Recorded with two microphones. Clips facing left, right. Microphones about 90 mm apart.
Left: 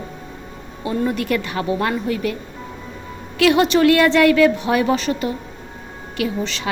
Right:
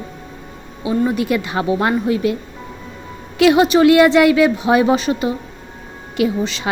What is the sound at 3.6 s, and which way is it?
A woman's voice, 10° right (ahead or behind).